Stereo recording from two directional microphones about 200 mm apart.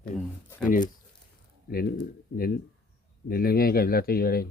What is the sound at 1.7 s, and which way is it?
Speech, 45° left (ahead or behind).